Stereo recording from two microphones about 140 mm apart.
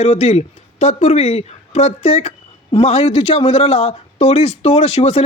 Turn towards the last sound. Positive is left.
turn(degrees=50)  # may be behind; listen again after turning